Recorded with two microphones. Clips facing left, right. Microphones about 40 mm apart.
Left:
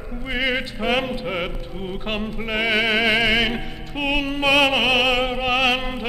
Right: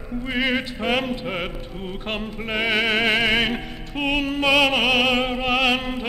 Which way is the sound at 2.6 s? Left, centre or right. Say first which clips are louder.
Left 1 dB; right.